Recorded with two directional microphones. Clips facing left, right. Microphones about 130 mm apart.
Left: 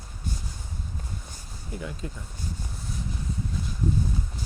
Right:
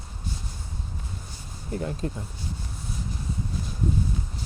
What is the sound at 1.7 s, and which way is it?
Speech, 45° right (ahead or behind).